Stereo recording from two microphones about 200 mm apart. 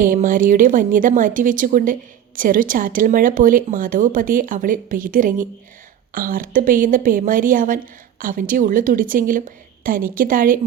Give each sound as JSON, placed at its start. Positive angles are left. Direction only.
{"t": 0.0, "sound": "a woman's voice", "side_deg": -40}